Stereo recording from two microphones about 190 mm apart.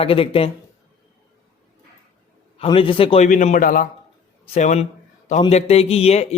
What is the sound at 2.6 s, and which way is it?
Speech, 30° left (ahead or behind).